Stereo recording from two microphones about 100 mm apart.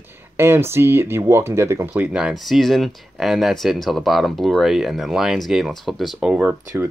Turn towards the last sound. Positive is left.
turn(degrees=-15)  # may be behind; listen again after turning